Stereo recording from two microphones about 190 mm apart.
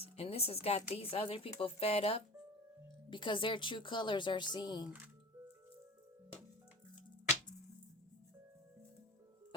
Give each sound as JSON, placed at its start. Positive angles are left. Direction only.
{"t": 0.0, "sound": "a woman's voice", "side_deg": 30}